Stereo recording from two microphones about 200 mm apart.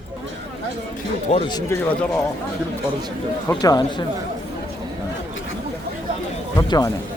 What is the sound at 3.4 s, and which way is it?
Speech, 20° left (ahead or behind).